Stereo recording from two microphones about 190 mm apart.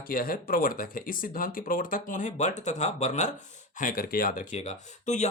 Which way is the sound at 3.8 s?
50° left (ahead or behind).